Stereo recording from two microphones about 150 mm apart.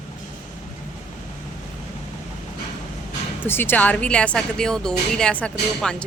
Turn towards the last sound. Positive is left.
turn(degrees=5)  # may be behind; listen again after turning